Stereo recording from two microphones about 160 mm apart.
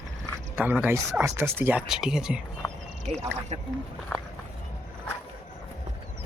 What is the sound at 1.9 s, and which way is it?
Speech, 5° right (ahead or behind).